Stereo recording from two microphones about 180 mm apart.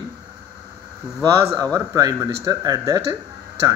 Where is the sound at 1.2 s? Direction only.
20° right (ahead or behind).